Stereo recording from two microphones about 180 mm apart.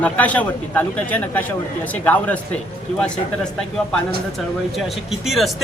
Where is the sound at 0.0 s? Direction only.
10° left (ahead or behind).